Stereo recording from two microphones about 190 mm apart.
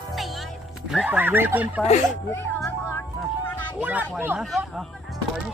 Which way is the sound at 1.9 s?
40° left (ahead or behind).